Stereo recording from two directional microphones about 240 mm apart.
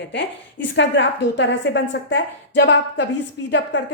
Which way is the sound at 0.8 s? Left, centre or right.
Left.